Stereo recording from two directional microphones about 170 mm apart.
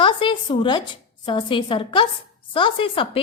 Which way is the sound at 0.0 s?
30° left (ahead or behind).